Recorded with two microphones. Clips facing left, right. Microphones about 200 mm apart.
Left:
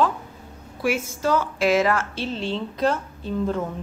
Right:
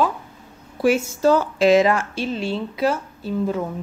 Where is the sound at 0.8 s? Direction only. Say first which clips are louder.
Right 6 dB; 35° right (ahead or behind).